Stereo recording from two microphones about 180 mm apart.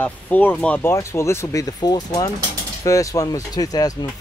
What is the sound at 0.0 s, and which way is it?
Speech, 10° left (ahead or behind).